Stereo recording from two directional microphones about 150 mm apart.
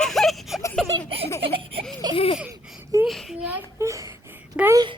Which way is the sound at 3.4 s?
15° right (ahead or behind).